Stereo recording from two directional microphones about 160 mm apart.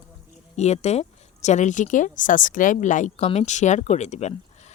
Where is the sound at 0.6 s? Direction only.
45° left (ahead or behind).